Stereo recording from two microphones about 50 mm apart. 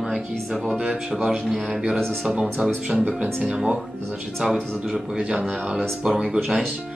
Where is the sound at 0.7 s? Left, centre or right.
Centre.